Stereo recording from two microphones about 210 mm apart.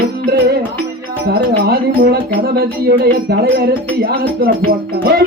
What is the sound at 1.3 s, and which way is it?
Music, 50° right (ahead or behind).